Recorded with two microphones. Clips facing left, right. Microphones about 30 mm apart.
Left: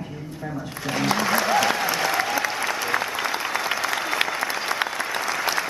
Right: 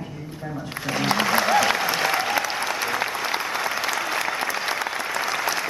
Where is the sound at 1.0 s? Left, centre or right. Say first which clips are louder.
Even; centre.